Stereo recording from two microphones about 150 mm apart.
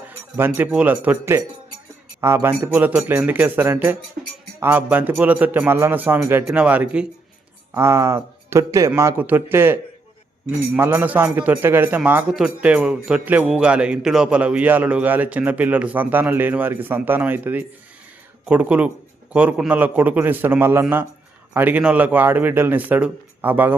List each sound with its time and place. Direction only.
0.0 s a man's voice: 15° right (ahead or behind)
7.7 s a man's voice: 15° right (ahead or behind)
10.8 s a man's voice: 15° right (ahead or behind)